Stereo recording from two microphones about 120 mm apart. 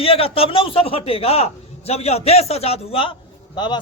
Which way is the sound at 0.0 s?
50° left (ahead or behind).